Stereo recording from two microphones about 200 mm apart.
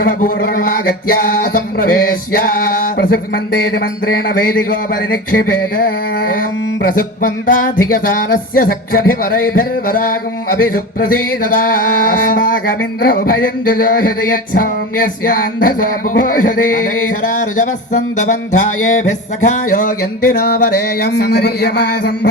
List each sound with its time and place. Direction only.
0.0 s music: 45° left (ahead or behind)
6.9 s music: 45° left (ahead or behind)